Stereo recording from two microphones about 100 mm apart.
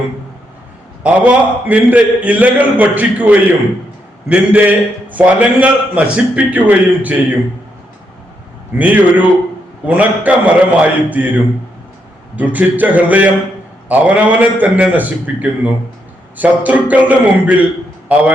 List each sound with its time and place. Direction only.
1.0 s a man's voice: 15° right (ahead or behind)
8.8 s a man's voice: 15° right (ahead or behind)
12.4 s a man's voice: 15° right (ahead or behind)